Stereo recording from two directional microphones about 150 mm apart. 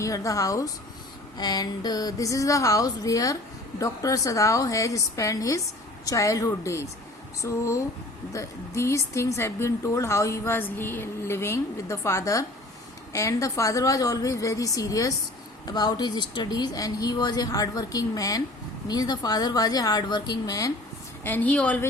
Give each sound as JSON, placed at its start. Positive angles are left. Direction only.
{"t": 0.0, "sound": "a woman's voice", "side_deg": 20}
{"t": 21.2, "sound": "a woman's voice", "side_deg": 10}